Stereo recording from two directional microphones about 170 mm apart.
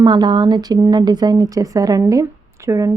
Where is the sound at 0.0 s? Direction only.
25° right (ahead or behind).